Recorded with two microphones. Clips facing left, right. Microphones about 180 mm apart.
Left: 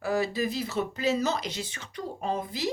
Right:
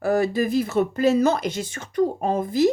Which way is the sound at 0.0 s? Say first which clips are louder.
Right 7 dB; 50° right (ahead or behind).